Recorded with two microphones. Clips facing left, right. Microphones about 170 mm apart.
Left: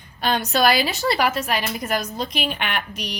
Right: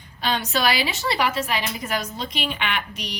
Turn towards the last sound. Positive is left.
turn(degrees=50)  # may be behind; listen again after turning